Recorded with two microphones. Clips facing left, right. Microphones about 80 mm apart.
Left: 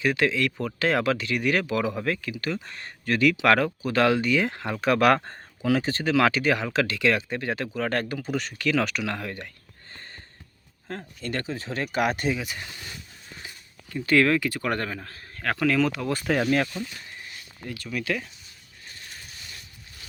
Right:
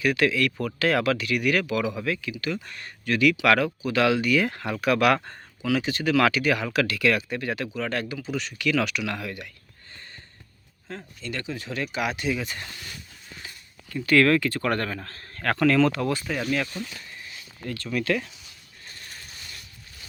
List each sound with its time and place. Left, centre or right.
0.0 s speech: left
7.8 s speech: left
10.8 s speech: left
12.3 s speech: centre
13.9 s speech: left; by 16.0 s centre
16.1 s speech: left
16.4 s speech: left
18.0 s speech: centre